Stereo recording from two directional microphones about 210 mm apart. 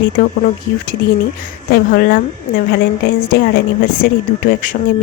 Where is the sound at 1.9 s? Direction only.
45° left (ahead or behind).